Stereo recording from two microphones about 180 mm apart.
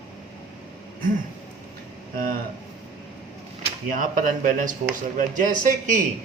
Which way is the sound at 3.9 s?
50° right (ahead or behind).